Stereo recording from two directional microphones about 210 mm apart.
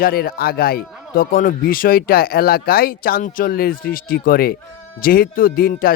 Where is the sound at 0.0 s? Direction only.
45° left (ahead or behind).